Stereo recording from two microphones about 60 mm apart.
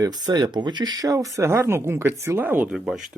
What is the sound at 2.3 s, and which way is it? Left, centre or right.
Speech, right.